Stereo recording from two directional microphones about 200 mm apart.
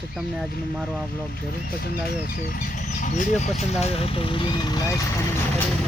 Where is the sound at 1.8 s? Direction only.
50° left (ahead or behind); by 4.9 s 20° left (ahead or behind).